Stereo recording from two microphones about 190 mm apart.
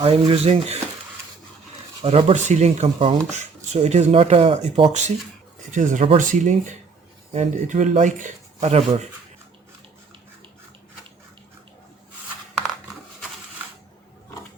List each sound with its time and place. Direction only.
0.0 s speech: 30° right (ahead or behind)
2.0 s speech: 30° right (ahead or behind)